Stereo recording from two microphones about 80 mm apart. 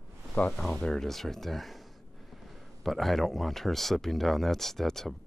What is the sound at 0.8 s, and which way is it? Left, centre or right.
Speech, centre.